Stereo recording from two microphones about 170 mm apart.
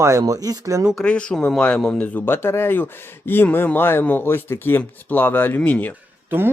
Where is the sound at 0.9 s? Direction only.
5° left (ahead or behind).